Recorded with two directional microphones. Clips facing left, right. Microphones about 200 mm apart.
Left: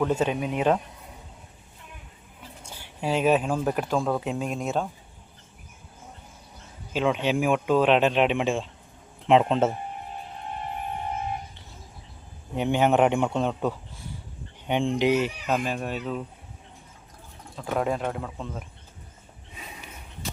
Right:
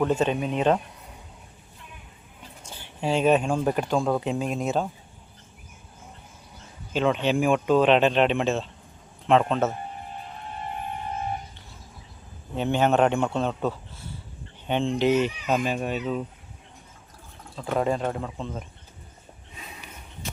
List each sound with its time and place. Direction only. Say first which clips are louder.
0.1 s speech: right 1 dB; 10° left (ahead or behind)
2.6 s speech: right 1 dB; 10° left (ahead or behind)
6.9 s speech: right 1 dB; 5° left (ahead or behind); by 9.7 s 25° left (ahead or behind)
12.5 s speech: even; 15° left (ahead or behind); by 16.2 s centre (ahead or behind)
17.6 s speech: right 2 dB; centre (ahead or behind)